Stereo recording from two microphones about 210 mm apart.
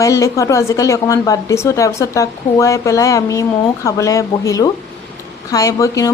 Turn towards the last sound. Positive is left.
turn(degrees=15)  # may be behind; listen again after turning